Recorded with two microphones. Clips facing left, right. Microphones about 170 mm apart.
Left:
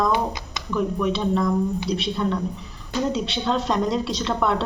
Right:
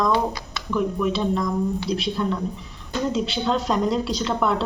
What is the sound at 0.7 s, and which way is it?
Speech, centre (ahead or behind).